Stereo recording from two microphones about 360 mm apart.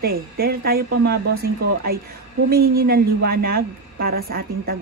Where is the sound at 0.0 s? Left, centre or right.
Right.